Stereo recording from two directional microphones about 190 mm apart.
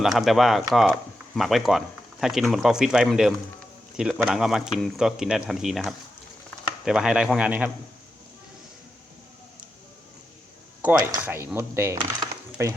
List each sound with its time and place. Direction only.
0.0 s speech: centre (ahead or behind)
10.9 s speech: 10° right (ahead or behind)
11.9 s a sound: 20° right (ahead or behind)